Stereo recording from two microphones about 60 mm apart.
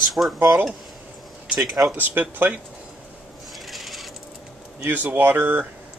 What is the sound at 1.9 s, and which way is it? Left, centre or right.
Speech, right.